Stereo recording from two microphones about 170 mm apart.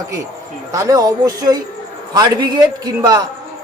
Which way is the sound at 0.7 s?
20° right (ahead or behind).